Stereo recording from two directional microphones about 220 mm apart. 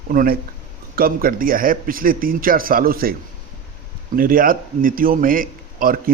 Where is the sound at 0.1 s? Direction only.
40° right (ahead or behind).